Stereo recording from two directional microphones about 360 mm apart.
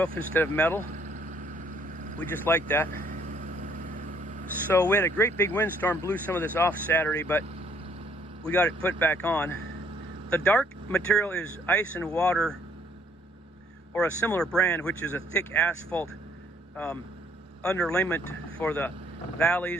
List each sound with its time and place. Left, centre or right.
0.3 s speech: centre
0.9 s vehicle: right
2.4 s speech: centre
2.9 s vehicle: right
4.7 s speech: centre
8.4 s speech: centre
13.9 s speech: centre